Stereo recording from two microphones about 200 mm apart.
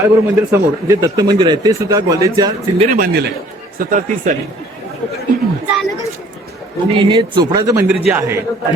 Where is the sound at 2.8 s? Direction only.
45° right (ahead or behind).